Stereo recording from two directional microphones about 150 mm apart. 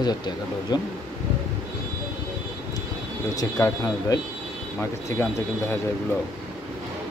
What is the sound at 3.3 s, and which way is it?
Speech, 20° left (ahead or behind).